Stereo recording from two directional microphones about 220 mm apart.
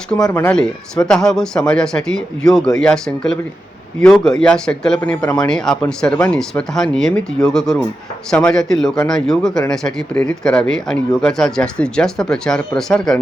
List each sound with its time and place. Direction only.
0.3 s a man's voice: 5° left (ahead or behind)